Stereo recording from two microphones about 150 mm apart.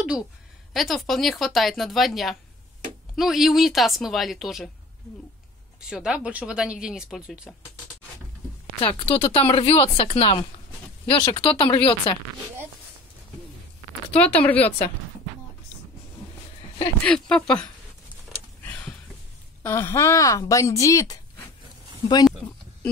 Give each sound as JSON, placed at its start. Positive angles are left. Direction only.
{"t": 0.7, "sound": "speech", "side_deg": 0}
{"t": 5.8, "sound": "speech", "side_deg": -5}
{"t": 8.8, "sound": "speech", "side_deg": 40}
{"t": 14.1, "sound": "speech", "side_deg": 10}
{"t": 17.0, "sound": "speech", "side_deg": 5}
{"t": 18.3, "sound": "a sound", "side_deg": 10}
{"t": 19.6, "sound": "speech", "side_deg": 15}